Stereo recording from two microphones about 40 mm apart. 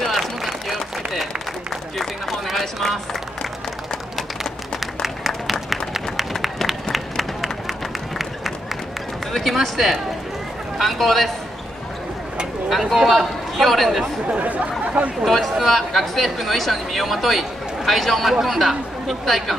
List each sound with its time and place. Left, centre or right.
0.0 s applause: centre
2.0 s run: centre
4.4 s applause: centre
6.1 s run: centre
9.3 s a sound: centre
10.8 s speech: centre
12.6 s a man's voice: centre
14.3 s speech: right
15.2 s speech: centre